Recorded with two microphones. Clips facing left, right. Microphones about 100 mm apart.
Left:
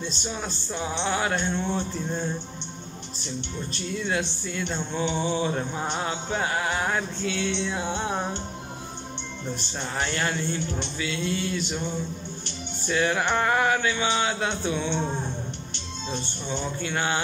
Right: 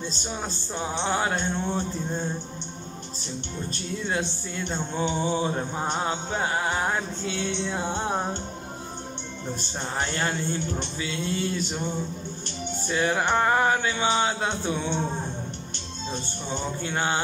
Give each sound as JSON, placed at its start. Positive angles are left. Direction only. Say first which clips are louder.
{"t": 0.7, "sound": "speech", "louder": "right 1 dB", "side_deg": -40}
{"t": 4.0, "sound": "speech", "louder": "even", "side_deg": -35}
{"t": 5.9, "sound": "music", "louder": "even", "side_deg": -30}
{"t": 7.2, "sound": "speech", "louder": "left 1 dB", "side_deg": -40}
{"t": 10.0, "sound": "speech", "louder": "left 1 dB", "side_deg": -40}
{"t": 12.8, "sound": "music", "louder": "left 1 dB", "side_deg": -30}
{"t": 13.3, "sound": "speech", "louder": "right 3 dB", "side_deg": -30}
{"t": 16.1, "sound": "speech", "louder": "left 1 dB", "side_deg": -40}
{"t": 16.9, "sound": "music", "louder": "right 1 dB", "side_deg": -30}